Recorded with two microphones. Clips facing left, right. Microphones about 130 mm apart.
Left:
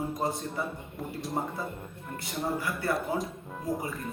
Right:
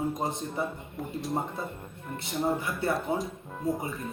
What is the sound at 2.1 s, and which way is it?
Speech, 25° right (ahead or behind).